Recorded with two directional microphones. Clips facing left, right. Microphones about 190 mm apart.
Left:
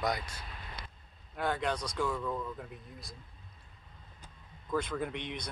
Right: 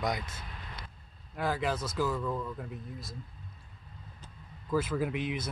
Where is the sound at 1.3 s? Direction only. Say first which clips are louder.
Right 1 dB; centre (ahead or behind).